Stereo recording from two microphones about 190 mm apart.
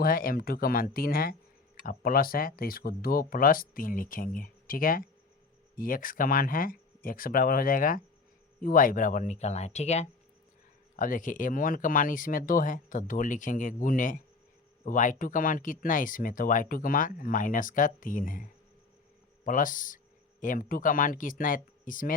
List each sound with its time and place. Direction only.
0.0 s speech: 50° left (ahead or behind)
19.5 s speech: 45° left (ahead or behind)